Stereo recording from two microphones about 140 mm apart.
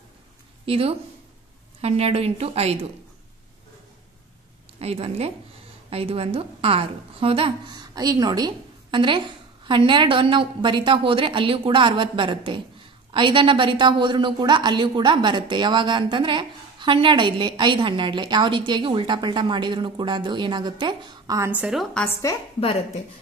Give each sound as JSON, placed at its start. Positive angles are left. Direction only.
{"t": 0.7, "sound": "a woman's voice", "side_deg": -45}
{"t": 4.7, "sound": "a woman's voice", "side_deg": -45}
{"t": 21.4, "sound": "a woman's voice", "side_deg": -10}
{"t": 22.3, "sound": "a woman's voice", "side_deg": 20}
{"t": 22.6, "sound": "speech", "side_deg": 45}